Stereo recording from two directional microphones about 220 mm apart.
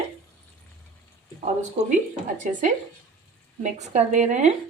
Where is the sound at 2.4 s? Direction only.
35° right (ahead or behind).